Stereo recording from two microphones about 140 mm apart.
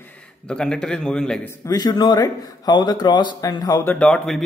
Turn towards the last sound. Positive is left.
turn(degrees=5)  # may be behind; listen again after turning